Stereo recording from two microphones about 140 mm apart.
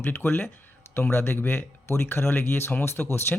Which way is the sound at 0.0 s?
15° left (ahead or behind).